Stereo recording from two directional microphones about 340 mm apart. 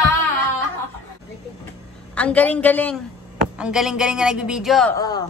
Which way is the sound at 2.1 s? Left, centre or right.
Centre.